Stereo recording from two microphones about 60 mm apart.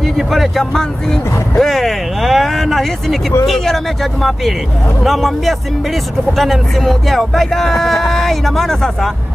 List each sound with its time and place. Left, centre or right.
0.0 s speech: centre